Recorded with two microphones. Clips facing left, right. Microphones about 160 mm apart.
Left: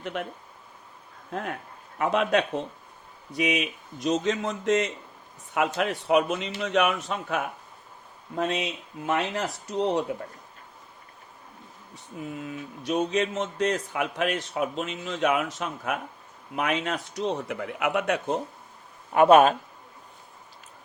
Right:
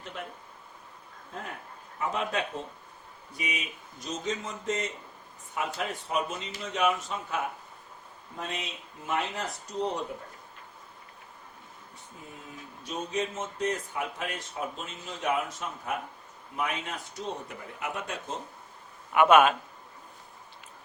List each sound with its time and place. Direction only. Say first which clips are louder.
0.0 s speech: left 8 dB; 70° left (ahead or behind)
1.3 s speech: left 8 dB; 75° left (ahead or behind)
12.4 s speech: left 9 dB; 80° left
19.1 s speech: left 4 dB; 35° left (ahead or behind)